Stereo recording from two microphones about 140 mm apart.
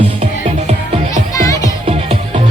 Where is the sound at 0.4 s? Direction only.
55° right (ahead or behind).